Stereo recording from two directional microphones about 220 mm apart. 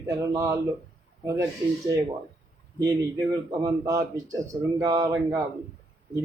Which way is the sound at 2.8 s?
20° right (ahead or behind).